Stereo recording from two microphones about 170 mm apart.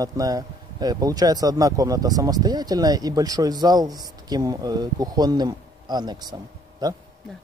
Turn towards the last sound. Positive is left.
turn(degrees=-25)  # may be behind; listen again after turning